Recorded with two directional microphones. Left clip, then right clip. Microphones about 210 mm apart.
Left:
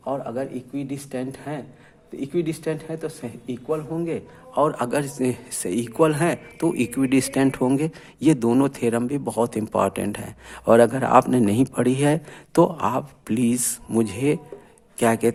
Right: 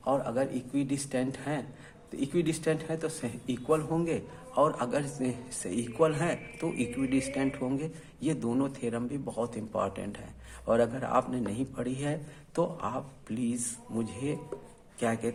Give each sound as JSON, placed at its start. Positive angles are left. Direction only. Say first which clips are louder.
{"t": 0.0, "sound": "speech", "louder": "left 2 dB", "side_deg": 20}
{"t": 4.5, "sound": "a man's voice", "louder": "left 6 dB", "side_deg": 30}